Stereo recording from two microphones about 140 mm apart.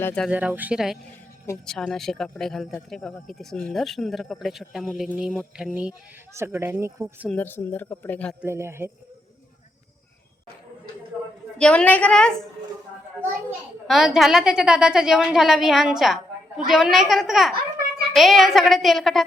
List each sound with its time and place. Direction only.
0.0 s speech: 5° left (ahead or behind)
0.3 s a woman's voice: 10° right (ahead or behind)
6.3 s speech: 15° right (ahead or behind)
7.3 s speech: 15° left (ahead or behind)
8.4 s speech: 15° right (ahead or behind)
11.5 s speech: 5° left (ahead or behind)
13.8 s a woman's voice: centre (ahead or behind)